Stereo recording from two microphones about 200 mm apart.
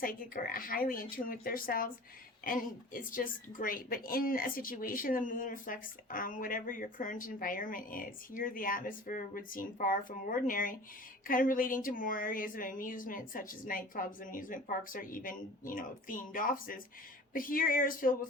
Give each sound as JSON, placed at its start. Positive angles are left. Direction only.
{"t": 0.0, "sound": "a woman's voice", "side_deg": 45}